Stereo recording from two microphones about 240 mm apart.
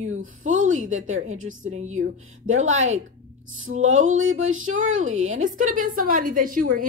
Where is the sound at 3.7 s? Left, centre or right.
Right.